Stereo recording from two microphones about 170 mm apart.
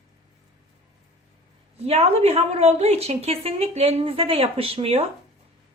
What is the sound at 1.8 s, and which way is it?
A woman's voice, 35° right (ahead or behind).